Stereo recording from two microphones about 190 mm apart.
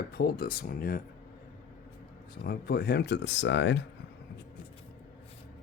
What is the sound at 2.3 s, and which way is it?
Speech, 55° left (ahead or behind).